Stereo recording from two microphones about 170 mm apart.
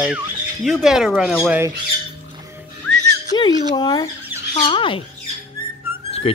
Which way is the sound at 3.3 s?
25° left (ahead or behind).